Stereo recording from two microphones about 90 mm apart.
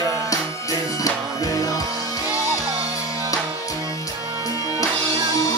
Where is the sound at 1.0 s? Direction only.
40° left (ahead or behind).